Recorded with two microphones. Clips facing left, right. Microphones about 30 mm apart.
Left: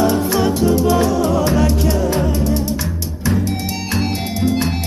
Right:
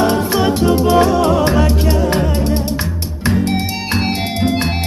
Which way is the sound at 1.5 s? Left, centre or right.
Right.